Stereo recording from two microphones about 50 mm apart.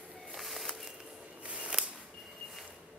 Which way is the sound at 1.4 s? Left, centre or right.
Right.